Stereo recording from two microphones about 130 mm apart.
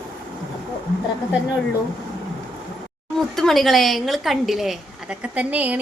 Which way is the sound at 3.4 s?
Centre (ahead or behind).